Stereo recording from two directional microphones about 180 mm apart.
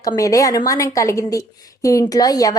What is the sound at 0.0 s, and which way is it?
A woman's voice, 20° left (ahead or behind).